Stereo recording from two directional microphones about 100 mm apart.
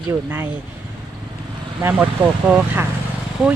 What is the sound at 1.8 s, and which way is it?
Speech, 20° right (ahead or behind).